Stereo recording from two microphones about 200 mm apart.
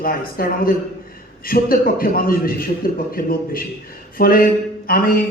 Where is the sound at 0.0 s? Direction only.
45° left (ahead or behind).